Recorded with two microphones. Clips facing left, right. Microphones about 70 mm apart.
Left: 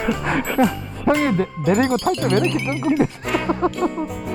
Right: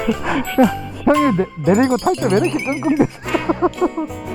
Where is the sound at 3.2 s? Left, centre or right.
Centre.